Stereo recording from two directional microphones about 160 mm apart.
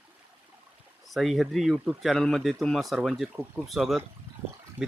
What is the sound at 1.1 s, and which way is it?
Speech, centre (ahead or behind).